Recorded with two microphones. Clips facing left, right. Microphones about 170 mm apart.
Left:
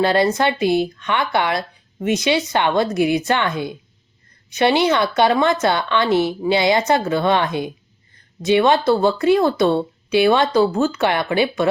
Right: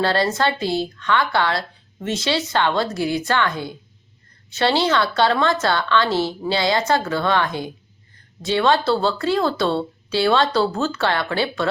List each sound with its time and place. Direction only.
0.0 s a woman's voice: 20° left (ahead or behind)